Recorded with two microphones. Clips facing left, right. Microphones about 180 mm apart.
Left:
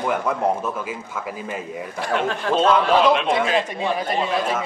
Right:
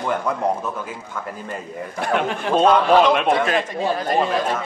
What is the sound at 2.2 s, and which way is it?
Speech, 15° right (ahead or behind).